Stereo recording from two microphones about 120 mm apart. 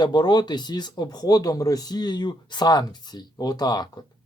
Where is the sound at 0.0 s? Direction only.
35° left (ahead or behind).